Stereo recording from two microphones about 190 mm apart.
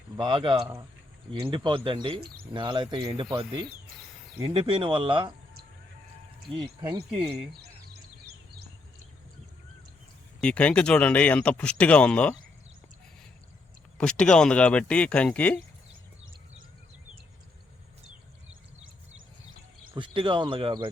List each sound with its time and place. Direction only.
0.2 s speech: 25° right (ahead or behind)
2.2 s speech: 55° right (ahead or behind)
2.6 s speech: 25° right (ahead or behind)
10.4 s speech: 5° left (ahead or behind)
14.0 s speech: 5° left (ahead or behind)
15.9 s a sound: 90° right
18.4 s a sound: 90° right
19.9 s speech: 25° right (ahead or behind)